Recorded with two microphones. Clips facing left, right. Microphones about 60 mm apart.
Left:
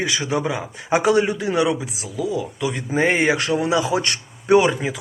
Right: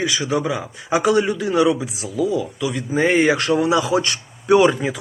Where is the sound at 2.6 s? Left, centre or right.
Left.